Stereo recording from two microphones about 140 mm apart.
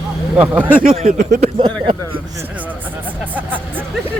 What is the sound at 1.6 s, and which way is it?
Speech, 40° right (ahead or behind).